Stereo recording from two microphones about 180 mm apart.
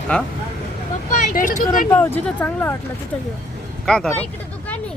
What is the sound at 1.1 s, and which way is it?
Speech, 45° left (ahead or behind).